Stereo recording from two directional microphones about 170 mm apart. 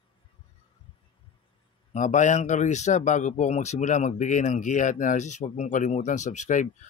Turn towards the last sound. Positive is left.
turn(degrees=45)  # may be behind; listen again after turning